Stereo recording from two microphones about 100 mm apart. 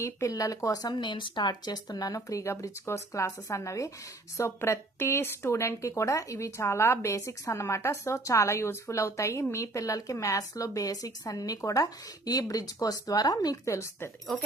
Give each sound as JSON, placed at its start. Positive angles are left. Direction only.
{"t": 0.0, "sound": "speech", "side_deg": 30}
{"t": 0.9, "sound": "speech", "side_deg": 55}